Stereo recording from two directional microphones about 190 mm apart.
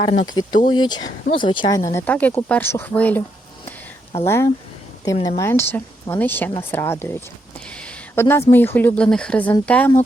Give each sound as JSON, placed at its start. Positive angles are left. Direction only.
{"t": 0.0, "sound": "speech", "side_deg": 35}
{"t": 0.3, "sound": "speech", "side_deg": 20}
{"t": 4.3, "sound": "speech", "side_deg": 15}